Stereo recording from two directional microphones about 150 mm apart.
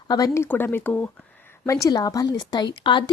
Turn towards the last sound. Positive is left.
turn(degrees=30)  # may be behind; listen again after turning